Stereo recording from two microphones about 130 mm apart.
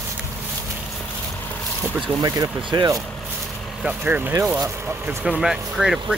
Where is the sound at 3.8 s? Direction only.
10° right (ahead or behind).